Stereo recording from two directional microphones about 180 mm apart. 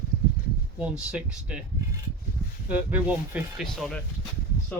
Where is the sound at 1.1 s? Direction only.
5° right (ahead or behind).